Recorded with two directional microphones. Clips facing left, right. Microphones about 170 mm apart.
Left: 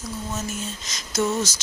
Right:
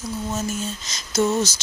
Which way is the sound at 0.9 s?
25° right (ahead or behind).